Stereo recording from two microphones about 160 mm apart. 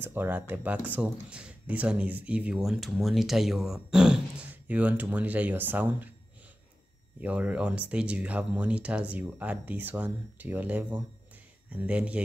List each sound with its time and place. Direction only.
0.0 s speech: 10° right (ahead or behind)
7.2 s speech: 10° right (ahead or behind)